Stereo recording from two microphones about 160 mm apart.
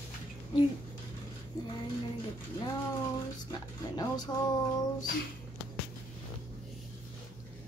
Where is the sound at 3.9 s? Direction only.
25° left (ahead or behind).